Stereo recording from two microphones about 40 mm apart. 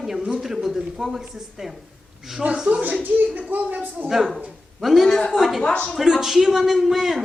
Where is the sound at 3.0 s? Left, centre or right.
Right.